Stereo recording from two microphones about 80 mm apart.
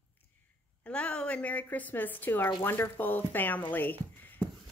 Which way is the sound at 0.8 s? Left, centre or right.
Centre.